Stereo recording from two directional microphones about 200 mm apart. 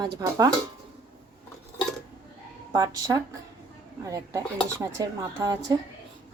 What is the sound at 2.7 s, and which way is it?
A woman's voice, 20° right (ahead or behind).